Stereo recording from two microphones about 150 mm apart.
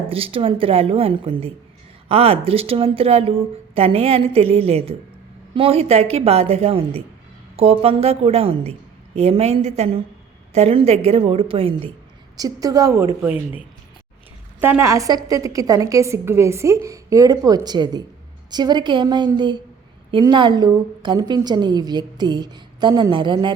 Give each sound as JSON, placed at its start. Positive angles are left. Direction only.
{"t": 0.1, "sound": "a woman's voice", "side_deg": -40}
{"t": 12.4, "sound": "a woman's voice", "side_deg": -25}
{"t": 14.6, "sound": "a woman's voice", "side_deg": -15}